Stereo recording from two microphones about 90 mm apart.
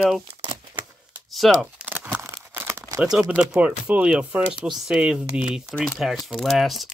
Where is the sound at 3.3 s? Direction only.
15° right (ahead or behind).